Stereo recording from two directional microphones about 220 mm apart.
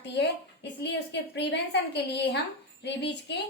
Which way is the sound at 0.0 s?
50° left (ahead or behind).